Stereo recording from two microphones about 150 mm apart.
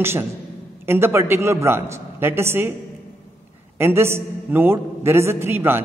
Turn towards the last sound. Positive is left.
turn(degrees=-15)  # may be behind; listen again after turning